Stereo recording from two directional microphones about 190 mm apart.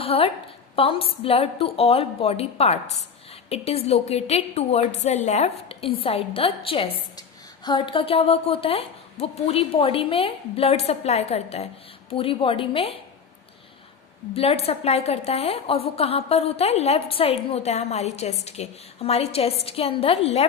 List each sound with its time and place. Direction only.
0.0 s a woman's voice: 30° left (ahead or behind)
14.3 s a woman's voice: 30° left (ahead or behind)